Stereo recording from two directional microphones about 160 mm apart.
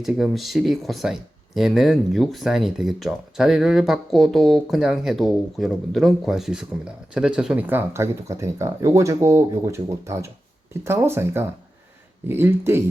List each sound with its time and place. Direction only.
0.0 s speech: centre (ahead or behind)